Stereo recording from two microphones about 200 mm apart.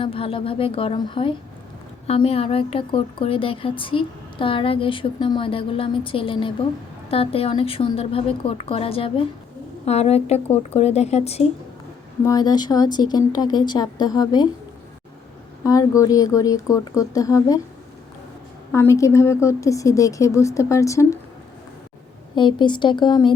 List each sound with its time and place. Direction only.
0.0 s a woman's voice: 25° left (ahead or behind)
12.2 s a woman's voice: 20° left (ahead or behind)
15.6 s a woman's voice: 15° left (ahead or behind)
18.7 s a woman's voice: 15° left (ahead or behind)
22.4 s a woman's voice: 25° left (ahead or behind)